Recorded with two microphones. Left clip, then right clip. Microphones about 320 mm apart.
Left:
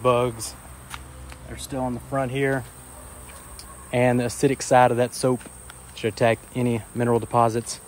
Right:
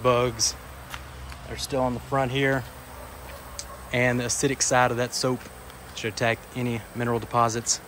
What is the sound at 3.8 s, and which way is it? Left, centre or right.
Speech, centre.